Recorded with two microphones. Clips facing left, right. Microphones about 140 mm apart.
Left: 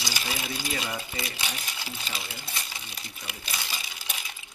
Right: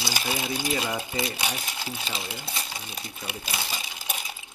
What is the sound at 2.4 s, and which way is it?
Speech, 30° right (ahead or behind).